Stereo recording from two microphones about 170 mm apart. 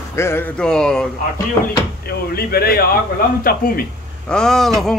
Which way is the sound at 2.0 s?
65° left (ahead or behind).